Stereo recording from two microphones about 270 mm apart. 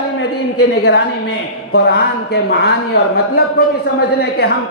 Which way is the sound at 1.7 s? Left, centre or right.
Left.